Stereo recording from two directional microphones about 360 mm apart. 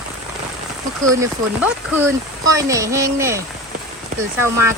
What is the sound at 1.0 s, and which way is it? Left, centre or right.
Speech, centre.